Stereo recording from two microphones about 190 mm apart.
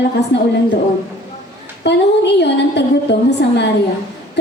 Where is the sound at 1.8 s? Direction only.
65° left (ahead or behind).